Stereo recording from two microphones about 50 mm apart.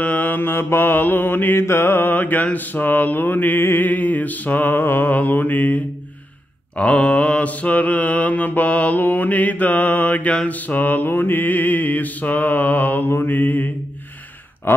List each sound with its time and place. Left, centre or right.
0.0 s mantra: left
2.1 s mantra: left
3.9 s mantra: left
6.8 s mantra: left
11.1 s mantra: left